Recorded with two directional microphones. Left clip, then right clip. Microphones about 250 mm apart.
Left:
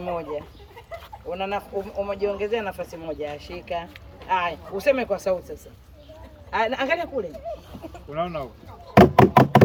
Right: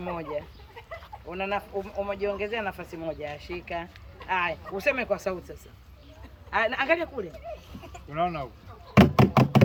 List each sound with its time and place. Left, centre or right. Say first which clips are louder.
0.0 s speech: left 4 dB; centre
6.5 s speech: left 1 dB; centre
9.0 s knock: left 7 dB; left